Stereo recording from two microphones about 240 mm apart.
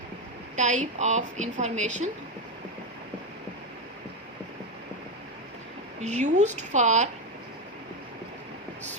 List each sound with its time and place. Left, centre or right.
0.5 s a woman's voice: right
6.0 s a woman's voice: right